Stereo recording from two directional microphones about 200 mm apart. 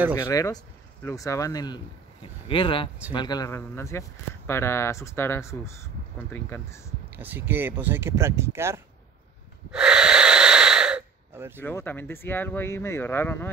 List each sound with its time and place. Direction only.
0.1 s speech: 15° left (ahead or behind)
7.2 s speech: 10° right (ahead or behind)
9.7 s wheeze: 5° right (ahead or behind)
11.6 s speech: 10° left (ahead or behind)